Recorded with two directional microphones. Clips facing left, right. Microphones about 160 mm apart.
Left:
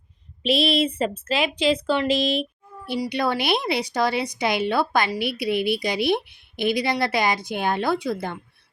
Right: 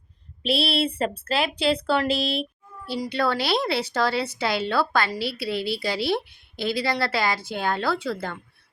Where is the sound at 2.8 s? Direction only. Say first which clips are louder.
Left 1 dB; 15° left (ahead or behind).